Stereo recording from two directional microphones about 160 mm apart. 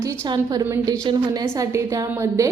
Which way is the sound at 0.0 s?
20° right (ahead or behind).